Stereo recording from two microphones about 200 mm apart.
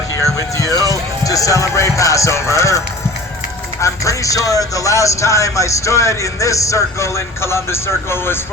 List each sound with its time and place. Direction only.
0.5 s speech: 15° left (ahead or behind)